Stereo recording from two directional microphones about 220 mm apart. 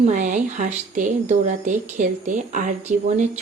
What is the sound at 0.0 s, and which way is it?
A woman's voice, 35° right (ahead or behind).